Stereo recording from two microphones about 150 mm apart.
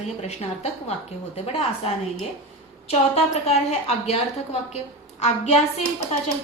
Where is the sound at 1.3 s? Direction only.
45° left (ahead or behind).